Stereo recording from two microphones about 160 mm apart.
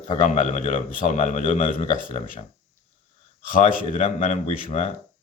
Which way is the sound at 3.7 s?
55° left (ahead or behind).